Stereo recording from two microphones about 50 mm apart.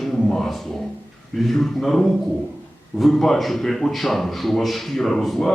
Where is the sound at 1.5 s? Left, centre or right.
Centre.